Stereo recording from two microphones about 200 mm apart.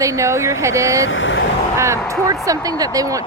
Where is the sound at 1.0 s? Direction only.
70° left (ahead or behind).